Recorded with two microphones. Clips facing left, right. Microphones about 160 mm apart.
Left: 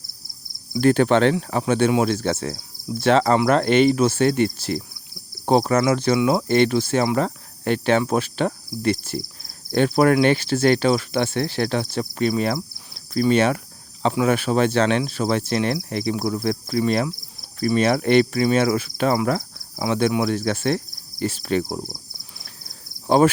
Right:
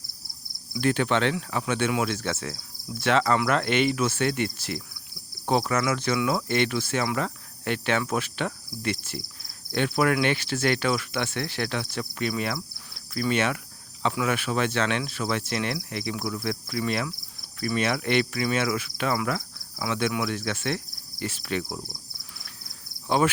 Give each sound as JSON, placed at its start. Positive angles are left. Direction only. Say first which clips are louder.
{"t": 0.7, "sound": "cricket", "louder": "left 7 dB", "side_deg": 40}